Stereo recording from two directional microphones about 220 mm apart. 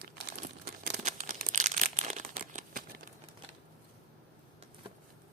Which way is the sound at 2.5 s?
40° right (ahead or behind).